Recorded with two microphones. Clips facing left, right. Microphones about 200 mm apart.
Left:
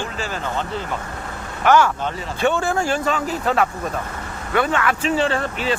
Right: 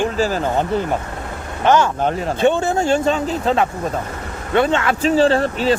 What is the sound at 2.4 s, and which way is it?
Speech, 20° right (ahead or behind).